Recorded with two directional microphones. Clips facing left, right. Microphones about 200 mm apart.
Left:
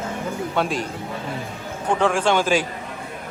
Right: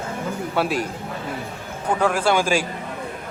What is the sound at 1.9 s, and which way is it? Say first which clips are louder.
Speech: even; 5° right (ahead or behind).